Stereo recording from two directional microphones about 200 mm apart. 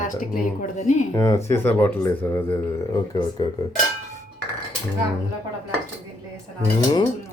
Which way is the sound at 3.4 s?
25° left (ahead or behind).